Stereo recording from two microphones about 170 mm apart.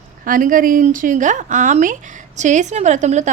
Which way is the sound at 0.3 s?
55° right (ahead or behind).